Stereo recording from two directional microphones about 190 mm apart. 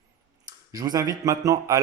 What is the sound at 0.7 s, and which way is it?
Speech, 20° right (ahead or behind).